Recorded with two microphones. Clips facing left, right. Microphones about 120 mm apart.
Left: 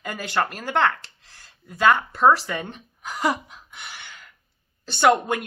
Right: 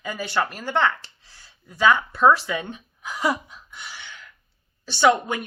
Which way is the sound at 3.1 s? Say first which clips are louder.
Even; 45° left (ahead or behind).